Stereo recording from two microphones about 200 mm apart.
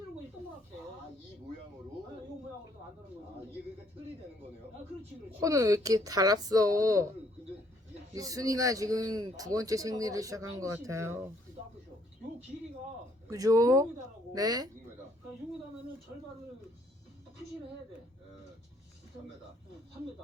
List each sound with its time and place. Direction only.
5.4 s a man's voice: 15° right (ahead or behind)
8.1 s a man's voice: 15° right (ahead or behind)
13.2 s a man's voice: 15° right (ahead or behind)